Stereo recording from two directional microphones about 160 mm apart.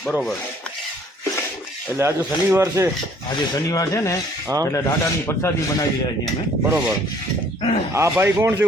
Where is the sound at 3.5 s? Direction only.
20° left (ahead or behind).